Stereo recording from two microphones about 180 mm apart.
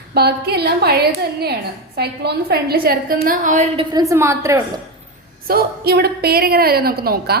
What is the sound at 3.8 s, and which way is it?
Speech, 25° right (ahead or behind).